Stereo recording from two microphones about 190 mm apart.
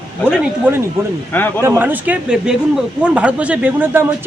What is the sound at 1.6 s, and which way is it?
Speech, 10° right (ahead or behind).